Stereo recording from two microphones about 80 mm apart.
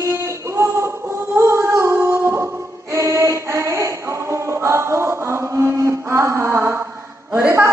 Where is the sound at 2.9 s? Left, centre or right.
Right.